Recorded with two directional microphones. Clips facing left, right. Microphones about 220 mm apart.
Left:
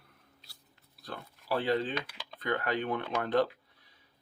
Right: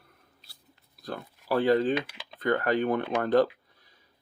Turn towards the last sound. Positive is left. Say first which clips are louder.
# right 5 dB
turn(degrees=-45)  # may be behind; listen again after turning